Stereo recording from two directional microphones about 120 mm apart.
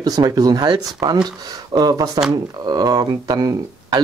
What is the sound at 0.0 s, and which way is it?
Speech, 35° right (ahead or behind).